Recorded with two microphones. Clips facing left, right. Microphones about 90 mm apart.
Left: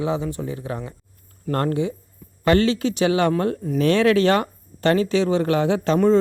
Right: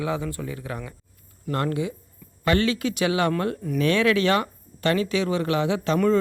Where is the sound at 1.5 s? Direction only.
40° left (ahead or behind).